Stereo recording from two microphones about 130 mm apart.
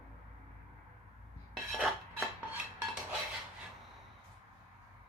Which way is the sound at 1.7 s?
5° right (ahead or behind).